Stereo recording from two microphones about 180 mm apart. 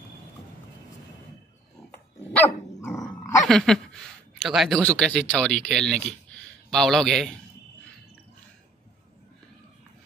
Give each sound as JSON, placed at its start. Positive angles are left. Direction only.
{"t": 3.0, "sound": "dog", "side_deg": 20}
{"t": 3.4, "sound": "speech", "side_deg": 0}